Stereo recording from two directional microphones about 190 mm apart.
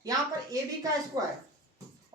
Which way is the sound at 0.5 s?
20° right (ahead or behind).